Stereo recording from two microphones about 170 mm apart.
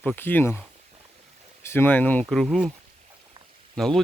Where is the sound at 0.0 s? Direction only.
10° left (ahead or behind).